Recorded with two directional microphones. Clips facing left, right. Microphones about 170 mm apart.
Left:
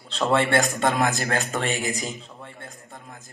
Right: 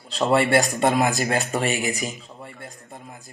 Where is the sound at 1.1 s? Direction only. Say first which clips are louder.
Right 2 dB; 15° right (ahead or behind).